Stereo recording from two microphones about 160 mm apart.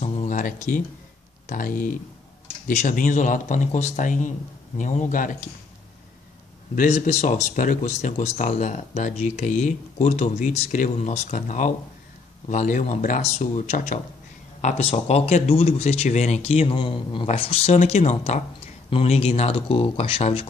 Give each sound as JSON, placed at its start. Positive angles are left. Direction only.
{"t": 0.0, "sound": "a sound", "side_deg": 45}
{"t": 1.5, "sound": "speech", "side_deg": 60}
{"t": 6.7, "sound": "speech", "side_deg": 55}